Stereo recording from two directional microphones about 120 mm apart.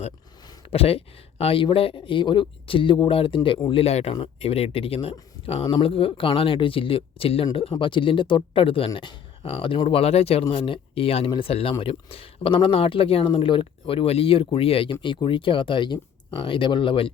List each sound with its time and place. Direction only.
0.7 s speech: 55° left (ahead or behind)